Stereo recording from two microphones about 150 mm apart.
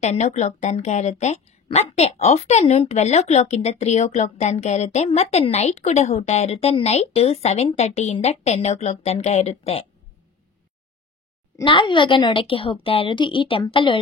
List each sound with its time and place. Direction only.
0.0 s a woman's voice: 50° left (ahead or behind)
11.6 s a woman's voice: 35° left (ahead or behind)